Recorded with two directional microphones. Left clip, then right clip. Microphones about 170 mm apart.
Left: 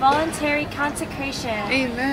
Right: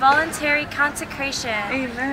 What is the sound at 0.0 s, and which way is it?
A woman's voice, 10° right (ahead or behind).